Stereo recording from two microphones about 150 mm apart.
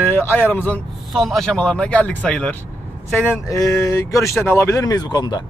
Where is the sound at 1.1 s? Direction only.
Centre (ahead or behind); by 5.4 s 30° left (ahead or behind).